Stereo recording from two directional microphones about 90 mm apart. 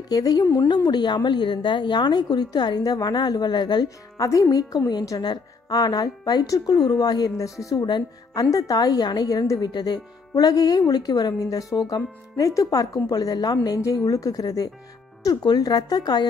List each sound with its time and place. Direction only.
0.1 s a woman's voice: 45° left (ahead or behind)